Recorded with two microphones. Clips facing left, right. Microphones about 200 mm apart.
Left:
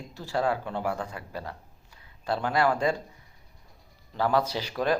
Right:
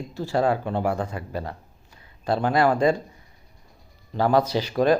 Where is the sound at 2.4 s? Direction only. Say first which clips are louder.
Right 5 dB; 50° right (ahead or behind).